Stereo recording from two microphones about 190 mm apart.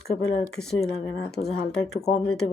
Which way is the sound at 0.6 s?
25° left (ahead or behind).